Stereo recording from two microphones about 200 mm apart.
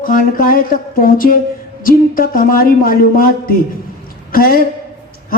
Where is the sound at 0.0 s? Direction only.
45° left (ahead or behind).